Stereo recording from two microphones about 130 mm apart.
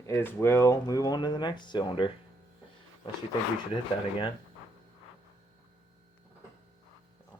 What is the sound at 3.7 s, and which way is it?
Speech, 40° left (ahead or behind).